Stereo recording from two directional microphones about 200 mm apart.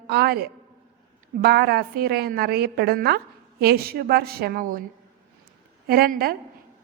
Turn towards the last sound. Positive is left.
turn(degrees=-50)  # may be behind; listen again after turning